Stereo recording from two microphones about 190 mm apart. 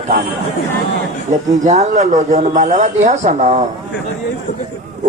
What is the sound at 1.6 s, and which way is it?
Speech, 40° right (ahead or behind).